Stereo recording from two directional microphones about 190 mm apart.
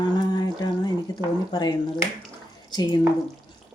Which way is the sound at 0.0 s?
20° left (ahead or behind).